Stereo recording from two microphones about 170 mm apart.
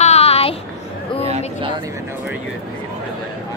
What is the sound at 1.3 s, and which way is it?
Speech, 35° right (ahead or behind).